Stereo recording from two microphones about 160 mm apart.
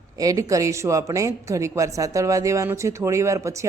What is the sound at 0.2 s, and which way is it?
A woman's voice, 20° right (ahead or behind).